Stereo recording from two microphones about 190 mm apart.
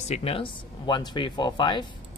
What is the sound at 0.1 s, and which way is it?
Speech, 30° left (ahead or behind).